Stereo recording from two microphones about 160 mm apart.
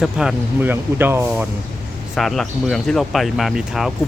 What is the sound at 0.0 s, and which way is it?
Speech, 5° right (ahead or behind).